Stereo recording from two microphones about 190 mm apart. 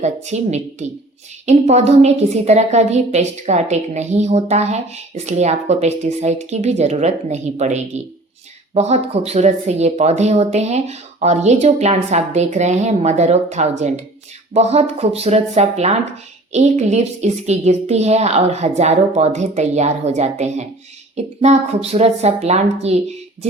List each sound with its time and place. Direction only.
0.0 s a woman's voice: 35° right (ahead or behind)